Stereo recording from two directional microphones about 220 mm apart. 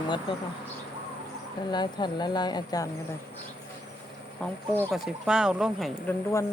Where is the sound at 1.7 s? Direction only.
20° left (ahead or behind).